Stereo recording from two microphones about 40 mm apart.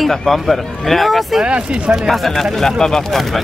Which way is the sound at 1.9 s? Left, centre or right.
Centre.